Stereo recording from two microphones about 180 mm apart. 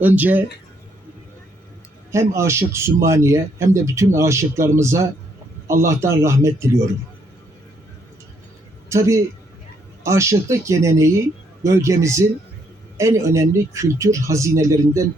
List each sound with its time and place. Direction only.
0.0 s speech: 10° right (ahead or behind)
2.1 s speech: 15° right (ahead or behind)
8.9 s speech: 15° right (ahead or behind)